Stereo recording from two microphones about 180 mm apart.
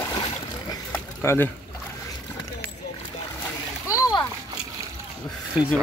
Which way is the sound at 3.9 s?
20° left (ahead or behind).